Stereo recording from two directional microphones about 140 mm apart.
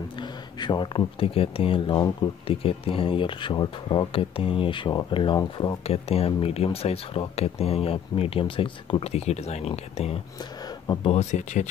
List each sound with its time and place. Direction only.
0.2 s speech: 35° left (ahead or behind)
5.9 s speech: 45° left (ahead or behind)